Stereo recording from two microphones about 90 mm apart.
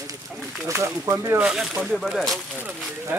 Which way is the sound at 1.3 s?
10° right (ahead or behind).